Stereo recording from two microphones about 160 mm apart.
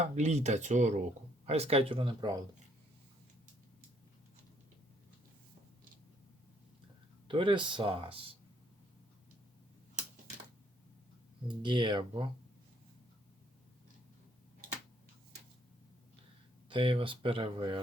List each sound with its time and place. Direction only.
0.0 s speech: 45° right (ahead or behind); by 2.4 s 30° right (ahead or behind)
7.3 s speech: 30° right (ahead or behind)
11.4 s speech: 30° right (ahead or behind)
16.6 s speech: 30° right (ahead or behind)